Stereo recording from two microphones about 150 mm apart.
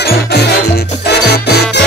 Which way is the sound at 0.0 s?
90° left.